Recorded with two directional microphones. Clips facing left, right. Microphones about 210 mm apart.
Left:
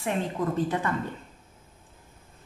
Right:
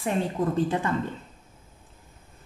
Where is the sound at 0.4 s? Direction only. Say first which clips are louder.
Right 2 dB; 25° right (ahead or behind).